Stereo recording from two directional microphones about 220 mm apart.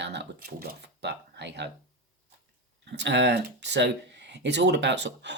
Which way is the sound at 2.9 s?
50° right (ahead or behind).